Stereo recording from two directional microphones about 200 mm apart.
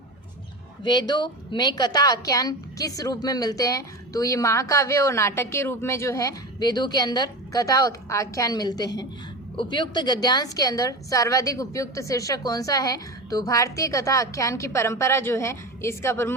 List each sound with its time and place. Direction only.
0.9 s a woman's voice: 20° left (ahead or behind)